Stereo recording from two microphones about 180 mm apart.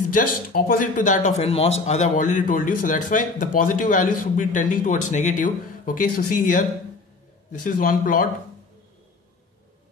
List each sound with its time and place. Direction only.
0.0 s a man's voice: 50° left (ahead or behind)
7.6 s a man's voice: 50° left (ahead or behind)